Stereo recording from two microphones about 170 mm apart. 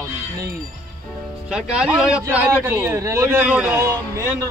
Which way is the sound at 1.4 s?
5° right (ahead or behind).